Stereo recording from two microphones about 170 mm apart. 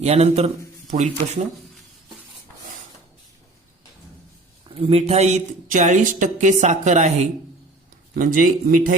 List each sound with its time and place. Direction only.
0.0 s a man's voice: 40° right (ahead or behind)
4.7 s speech: 35° right (ahead or behind); by 9.0 s 55° right (ahead or behind)